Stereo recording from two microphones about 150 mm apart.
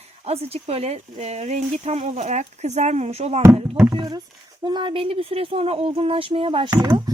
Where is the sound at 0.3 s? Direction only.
45° right (ahead or behind).